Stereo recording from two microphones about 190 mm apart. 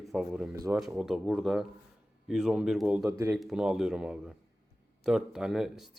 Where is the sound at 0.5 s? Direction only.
15° right (ahead or behind).